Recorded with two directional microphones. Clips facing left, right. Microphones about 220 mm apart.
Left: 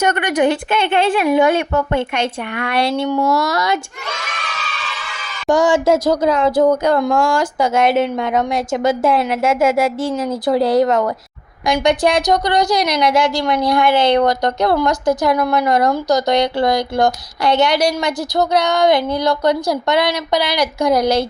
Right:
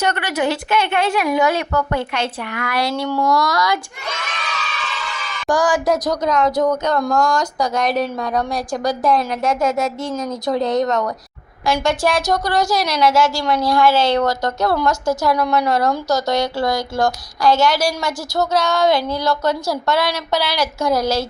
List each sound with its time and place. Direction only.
0.0 s speech: 15° left (ahead or behind)
0.7 s speech: 30° left (ahead or behind)
5.5 s speech: 25° left (ahead or behind)
11.6 s speech: 20° left (ahead or behind)